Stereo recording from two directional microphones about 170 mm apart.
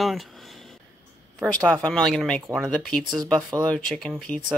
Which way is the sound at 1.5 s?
5° left (ahead or behind).